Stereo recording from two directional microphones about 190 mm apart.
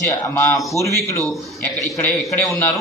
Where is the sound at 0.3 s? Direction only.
15° left (ahead or behind).